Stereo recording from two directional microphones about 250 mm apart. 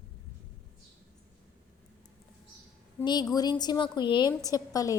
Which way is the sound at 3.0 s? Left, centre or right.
Centre.